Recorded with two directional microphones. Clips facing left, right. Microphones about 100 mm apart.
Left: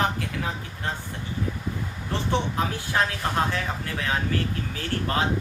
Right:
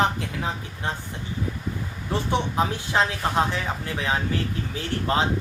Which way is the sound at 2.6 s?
20° right (ahead or behind).